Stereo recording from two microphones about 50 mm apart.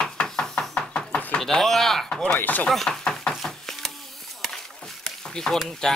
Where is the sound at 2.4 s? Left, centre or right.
Left.